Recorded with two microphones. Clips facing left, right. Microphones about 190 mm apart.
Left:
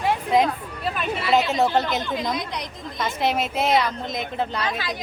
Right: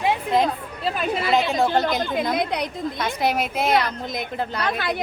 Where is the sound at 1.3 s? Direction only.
5° left (ahead or behind).